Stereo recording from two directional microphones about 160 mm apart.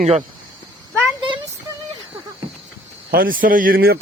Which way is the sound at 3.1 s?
65° right (ahead or behind).